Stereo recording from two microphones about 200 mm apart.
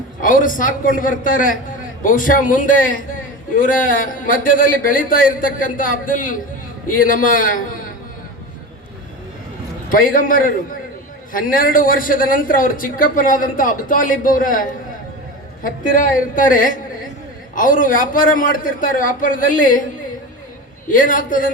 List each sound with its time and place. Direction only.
0.2 s a man's voice: 40° left (ahead or behind)
9.9 s a man's voice: 45° left (ahead or behind)
20.8 s a man's voice: 40° left (ahead or behind)